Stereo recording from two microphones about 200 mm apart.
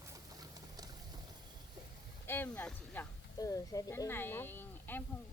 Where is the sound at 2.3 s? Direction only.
10° left (ahead or behind).